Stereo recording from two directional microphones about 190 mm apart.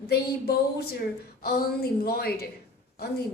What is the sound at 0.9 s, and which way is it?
A woman's voice, 55° left (ahead or behind).